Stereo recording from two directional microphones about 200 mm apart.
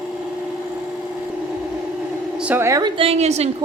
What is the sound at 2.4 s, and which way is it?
A woman's voice, 10° right (ahead or behind).